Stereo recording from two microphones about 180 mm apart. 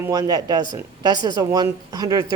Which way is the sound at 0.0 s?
20° right (ahead or behind).